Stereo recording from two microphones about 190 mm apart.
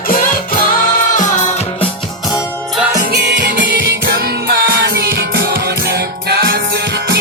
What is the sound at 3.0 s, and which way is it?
Music, 55° right (ahead or behind).